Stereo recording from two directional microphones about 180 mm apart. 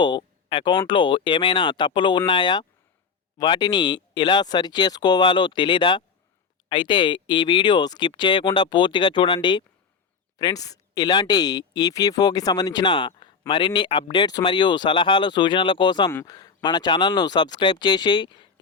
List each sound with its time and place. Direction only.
0.0 s speech: 25° left (ahead or behind)